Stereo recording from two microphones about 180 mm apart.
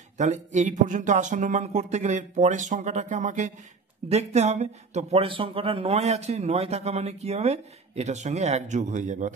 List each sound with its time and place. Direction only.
0.2 s speech: 40° right (ahead or behind)